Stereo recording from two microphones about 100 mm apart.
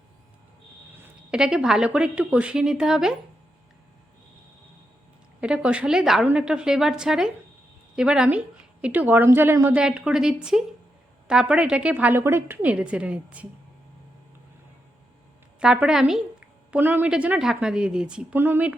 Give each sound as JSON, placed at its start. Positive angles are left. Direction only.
{"t": 1.3, "sound": "a woman's voice", "side_deg": -5}
{"t": 5.4, "sound": "a woman's voice", "side_deg": -10}
{"t": 9.7, "sound": "a woman's voice", "side_deg": -10}
{"t": 12.7, "sound": "a woman's voice", "side_deg": -10}
{"t": 15.6, "sound": "a woman's voice", "side_deg": -10}
{"t": 16.7, "sound": "a woman's voice", "side_deg": -15}
{"t": 18.3, "sound": "a woman's voice", "side_deg": -20}